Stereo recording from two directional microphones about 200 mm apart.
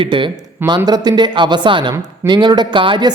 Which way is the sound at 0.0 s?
25° right (ahead or behind).